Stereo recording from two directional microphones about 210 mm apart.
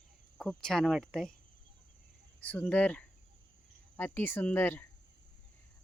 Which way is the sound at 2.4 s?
5° left (ahead or behind).